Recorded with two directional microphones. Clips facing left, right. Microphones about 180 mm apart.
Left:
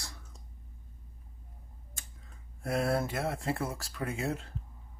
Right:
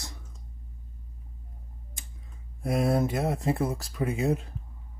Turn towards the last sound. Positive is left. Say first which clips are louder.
# right 7 dB
turn(degrees=-15)  # may be behind; listen again after turning